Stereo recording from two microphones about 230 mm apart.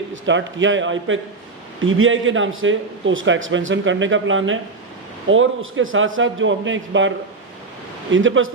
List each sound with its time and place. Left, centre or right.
0.1 s a man's voice: right
8.1 s a man's voice: right